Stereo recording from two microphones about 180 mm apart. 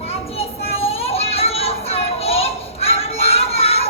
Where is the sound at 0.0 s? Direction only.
35° left (ahead or behind).